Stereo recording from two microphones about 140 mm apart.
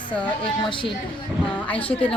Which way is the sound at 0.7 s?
35° left (ahead or behind).